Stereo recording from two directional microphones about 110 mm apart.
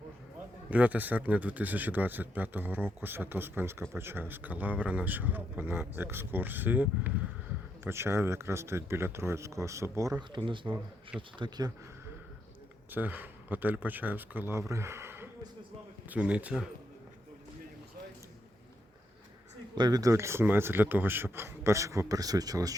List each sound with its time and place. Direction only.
0.7 s a man's voice: 15° right (ahead or behind)
10.2 s speech: 45° right (ahead or behind)
12.9 s speech: 15° right (ahead or behind)
14.7 s a sound: 25° right (ahead or behind)
16.0 s speech: 10° right (ahead or behind)
19.7 s a man's voice: 35° right (ahead or behind)